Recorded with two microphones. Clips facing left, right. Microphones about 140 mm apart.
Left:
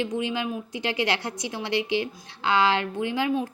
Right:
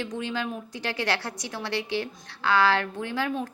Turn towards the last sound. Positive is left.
turn(degrees=15)  # may be behind; listen again after turning